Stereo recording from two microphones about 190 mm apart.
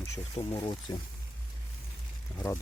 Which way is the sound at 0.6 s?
25° left (ahead or behind).